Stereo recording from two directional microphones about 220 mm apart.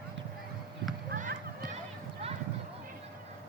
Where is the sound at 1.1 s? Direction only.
40° right (ahead or behind).